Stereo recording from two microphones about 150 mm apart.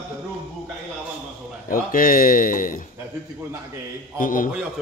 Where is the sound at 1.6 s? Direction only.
70° left (ahead or behind).